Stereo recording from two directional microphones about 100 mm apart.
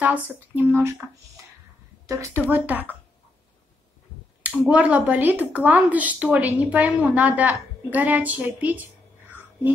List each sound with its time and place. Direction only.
0.0 s speech: 15° right (ahead or behind)
2.0 s a woman's voice: 30° right (ahead or behind)
2.3 s speech: 20° right (ahead or behind)
4.6 s speech: 15° right (ahead or behind)